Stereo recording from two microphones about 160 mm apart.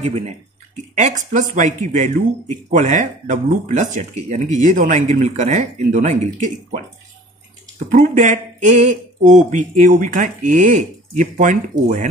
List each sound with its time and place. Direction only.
0.0 s speech: 45° right (ahead or behind)
7.9 s speech: 50° right (ahead or behind)